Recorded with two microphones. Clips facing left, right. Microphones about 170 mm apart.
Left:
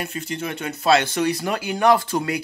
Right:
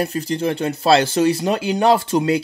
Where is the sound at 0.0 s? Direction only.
35° right (ahead or behind).